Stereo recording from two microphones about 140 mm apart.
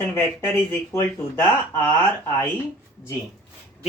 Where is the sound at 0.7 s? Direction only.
15° left (ahead or behind).